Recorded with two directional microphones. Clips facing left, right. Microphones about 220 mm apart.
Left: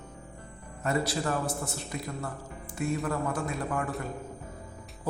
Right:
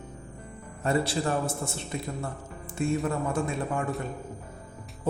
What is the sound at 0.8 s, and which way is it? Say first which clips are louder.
A man's voice: right 3 dB; 30° right (ahead or behind).